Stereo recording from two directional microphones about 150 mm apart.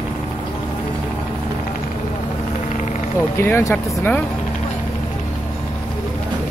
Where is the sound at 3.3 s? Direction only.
20° left (ahead or behind).